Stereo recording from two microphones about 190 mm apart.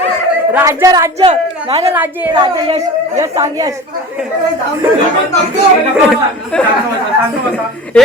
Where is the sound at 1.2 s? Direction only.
30° right (ahead or behind).